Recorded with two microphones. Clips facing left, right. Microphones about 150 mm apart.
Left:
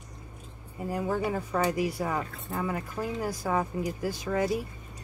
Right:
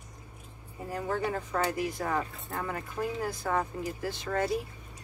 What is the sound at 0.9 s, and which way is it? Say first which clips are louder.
Speech: left 2 dB; 10° left (ahead or behind).